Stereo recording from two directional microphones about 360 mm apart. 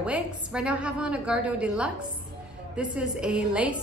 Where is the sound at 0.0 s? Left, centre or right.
Centre.